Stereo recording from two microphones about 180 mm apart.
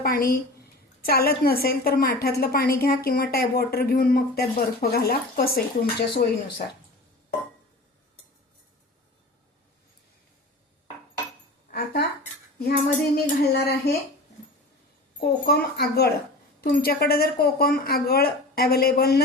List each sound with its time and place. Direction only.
0.0 s a woman's voice: 55° left (ahead or behind)
11.7 s a sound: 60° left (ahead or behind)
12.5 s cutlery: 60° left (ahead or behind)
13.5 s a woman's voice: 60° left (ahead or behind)
15.2 s a woman's voice: 60° left (ahead or behind)